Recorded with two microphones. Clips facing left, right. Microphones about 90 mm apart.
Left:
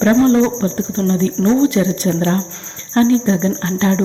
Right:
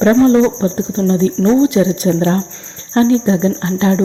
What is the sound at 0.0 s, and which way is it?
Speech, 20° right (ahead or behind).